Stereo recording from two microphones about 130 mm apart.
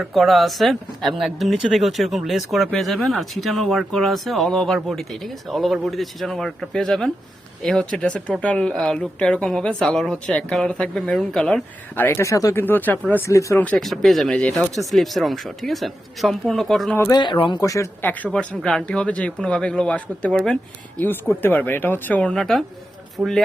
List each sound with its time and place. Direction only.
0.0 s speech: centre (ahead or behind)
12.0 s speech: 20° left (ahead or behind)
13.7 s speech: centre (ahead or behind)
17.1 s speech: 35° left (ahead or behind)
17.6 s speech: 25° left (ahead or behind)
18.0 s speech: 10° left (ahead or behind)